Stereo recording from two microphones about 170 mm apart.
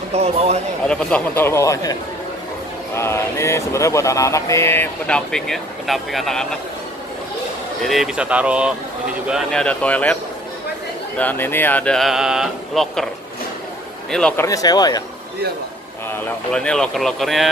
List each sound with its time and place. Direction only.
0.1 s speech: 40° right (ahead or behind)
0.8 s speech: 5° left (ahead or behind)
7.8 s speech: centre (ahead or behind)
11.1 s speech: 10° left (ahead or behind)
14.1 s speech: 5° left (ahead or behind)
14.4 s speech: 20° left (ahead or behind)
16.5 s speech: 5° left (ahead or behind)